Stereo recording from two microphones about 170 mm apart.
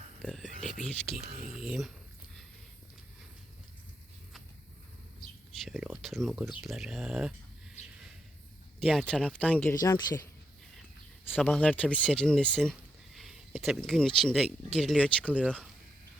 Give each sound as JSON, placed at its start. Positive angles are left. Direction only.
{"t": 0.2, "sound": "a sound", "side_deg": 0}
{"t": 1.5, "sound": "speech", "side_deg": 0}
{"t": 5.6, "sound": "speech", "side_deg": -5}
{"t": 7.8, "sound": "a sound", "side_deg": 45}
{"t": 8.8, "sound": "speech", "side_deg": 0}
{"t": 9.8, "sound": "speech", "side_deg": 20}
{"t": 11.3, "sound": "speech", "side_deg": 10}